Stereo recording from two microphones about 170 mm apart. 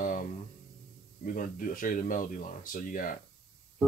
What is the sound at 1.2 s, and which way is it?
Speech, 55° left (ahead or behind).